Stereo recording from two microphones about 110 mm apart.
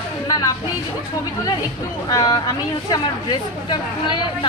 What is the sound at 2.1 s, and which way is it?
Speech, 35° left (ahead or behind).